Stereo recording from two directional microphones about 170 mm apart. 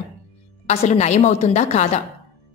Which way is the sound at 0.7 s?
40° left (ahead or behind).